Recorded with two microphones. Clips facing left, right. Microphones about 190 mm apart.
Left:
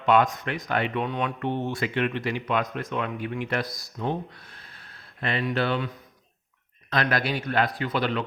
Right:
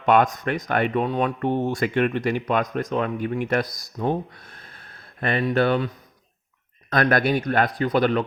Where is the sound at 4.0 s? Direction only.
50° right (ahead or behind).